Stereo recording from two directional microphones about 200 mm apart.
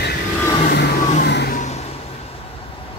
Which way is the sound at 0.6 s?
55° left (ahead or behind).